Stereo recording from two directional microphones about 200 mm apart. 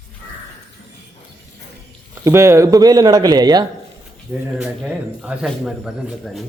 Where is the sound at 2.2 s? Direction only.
15° right (ahead or behind).